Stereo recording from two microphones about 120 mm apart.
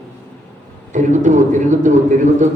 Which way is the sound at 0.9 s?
90° right.